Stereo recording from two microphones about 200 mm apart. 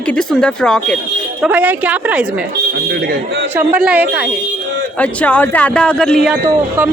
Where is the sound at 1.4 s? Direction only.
10° right (ahead or behind).